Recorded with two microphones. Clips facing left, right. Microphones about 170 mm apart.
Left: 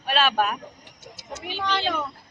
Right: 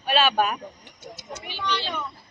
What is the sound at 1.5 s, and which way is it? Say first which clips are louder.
Speech: left 3 dB; 50° left (ahead or behind).